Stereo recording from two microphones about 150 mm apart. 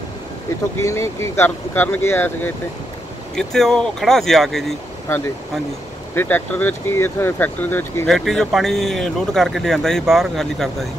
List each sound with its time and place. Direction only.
0.7 s speech: 20° left (ahead or behind)
3.3 s speech: 5° left (ahead or behind)
6.1 s speech: 15° left (ahead or behind)
8.1 s speech: centre (ahead or behind)